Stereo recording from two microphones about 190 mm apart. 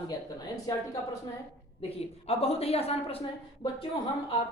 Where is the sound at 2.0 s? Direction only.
30° left (ahead or behind).